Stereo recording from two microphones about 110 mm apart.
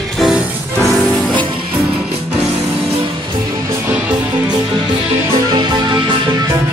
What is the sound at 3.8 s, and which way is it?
Music, 15° right (ahead or behind).